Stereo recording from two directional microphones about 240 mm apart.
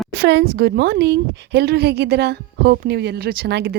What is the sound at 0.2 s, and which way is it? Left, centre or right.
A woman's voice, right.